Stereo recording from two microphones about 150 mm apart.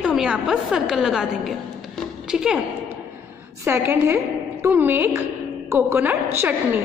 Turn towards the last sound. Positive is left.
turn(degrees=-15)  # may be behind; listen again after turning